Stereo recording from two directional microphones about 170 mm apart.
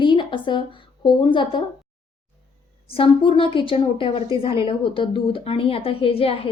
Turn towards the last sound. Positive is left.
turn(degrees=35)  # may be behind; listen again after turning